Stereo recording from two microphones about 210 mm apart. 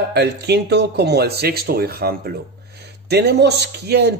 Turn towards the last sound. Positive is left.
turn(degrees=-50)  # may be behind; listen again after turning